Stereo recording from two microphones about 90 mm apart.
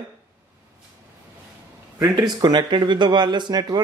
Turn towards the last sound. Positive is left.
turn(degrees=-50)  # may be behind; listen again after turning